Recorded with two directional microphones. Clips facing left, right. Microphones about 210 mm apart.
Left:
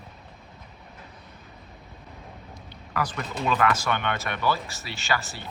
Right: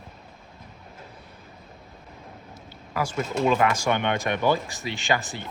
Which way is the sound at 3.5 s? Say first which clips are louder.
Left 1 dB; 15° right (ahead or behind).